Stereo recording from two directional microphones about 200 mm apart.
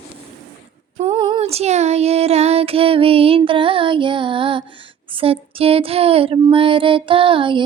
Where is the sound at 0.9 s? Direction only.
30° right (ahead or behind).